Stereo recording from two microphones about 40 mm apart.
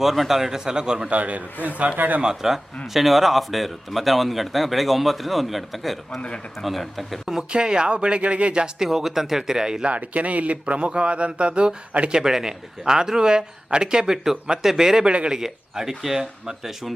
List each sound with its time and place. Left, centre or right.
0.0 s a man's voice: centre
1.1 s a man's voice: right
1.6 s a man's voice: left
2.0 s speech: right
2.2 s a man's voice: centre
6.1 s speech: left
6.6 s a man's voice: centre
7.5 s speech: right
8.6 s a man's voice: centre
9.8 s speech: right
12.2 s a man's voice: centre
15.0 s speech: right
15.4 s a man's voice: centre